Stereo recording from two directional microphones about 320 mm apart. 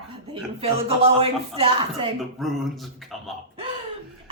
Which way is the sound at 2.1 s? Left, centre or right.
Centre.